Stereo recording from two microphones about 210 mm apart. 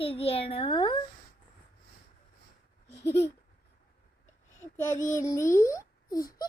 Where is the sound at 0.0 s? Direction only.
25° left (ahead or behind).